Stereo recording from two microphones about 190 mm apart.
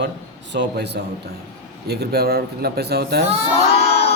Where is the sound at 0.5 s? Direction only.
65° right (ahead or behind).